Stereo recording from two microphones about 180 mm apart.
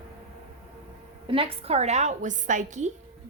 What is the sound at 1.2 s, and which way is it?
A woman's voice, 30° right (ahead or behind).